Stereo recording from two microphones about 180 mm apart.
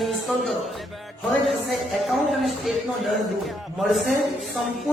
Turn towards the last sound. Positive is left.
turn(degrees=0)  # may be behind; listen again after turning